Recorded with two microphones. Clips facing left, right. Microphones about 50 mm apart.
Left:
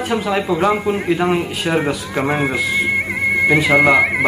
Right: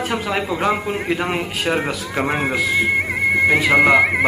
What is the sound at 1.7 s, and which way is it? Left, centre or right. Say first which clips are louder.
Speech: left 3 dB; centre.